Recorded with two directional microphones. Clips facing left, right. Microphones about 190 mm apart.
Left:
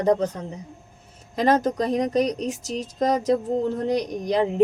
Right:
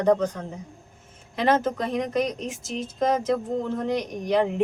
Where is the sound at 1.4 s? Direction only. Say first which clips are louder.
Left 2 dB; 40° left (ahead or behind).